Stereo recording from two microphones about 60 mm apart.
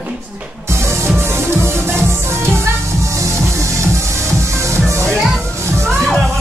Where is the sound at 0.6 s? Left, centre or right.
Right.